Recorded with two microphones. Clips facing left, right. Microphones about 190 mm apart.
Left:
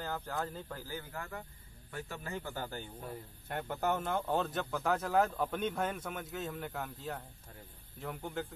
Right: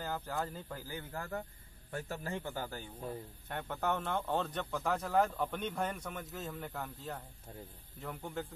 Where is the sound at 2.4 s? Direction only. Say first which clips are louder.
Even; 10° right (ahead or behind).